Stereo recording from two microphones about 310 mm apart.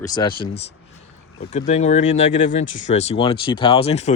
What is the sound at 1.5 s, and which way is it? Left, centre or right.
Speech, left.